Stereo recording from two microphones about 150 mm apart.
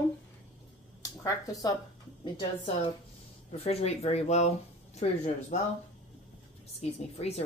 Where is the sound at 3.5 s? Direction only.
45° left (ahead or behind).